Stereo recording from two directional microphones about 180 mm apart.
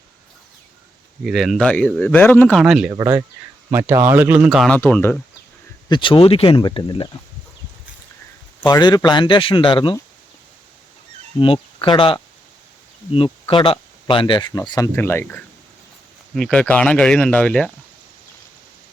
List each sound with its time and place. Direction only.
1.2 s speech: centre (ahead or behind)
2.9 s speech: 20° right (ahead or behind); by 4.8 s centre (ahead or behind)
4.8 s speech: 10° left (ahead or behind)
5.9 s speech: 30° left (ahead or behind)
8.6 s speech: 25° left (ahead or behind)
11.3 s speech: 30° left (ahead or behind); by 17.7 s 5° left (ahead or behind)